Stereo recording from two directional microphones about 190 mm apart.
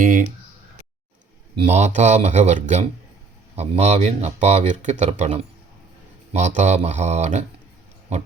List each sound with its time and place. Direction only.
0.0 s speech: 45° right (ahead or behind)
1.5 s speech: 35° right (ahead or behind)